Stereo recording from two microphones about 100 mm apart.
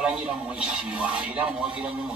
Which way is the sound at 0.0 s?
10° right (ahead or behind).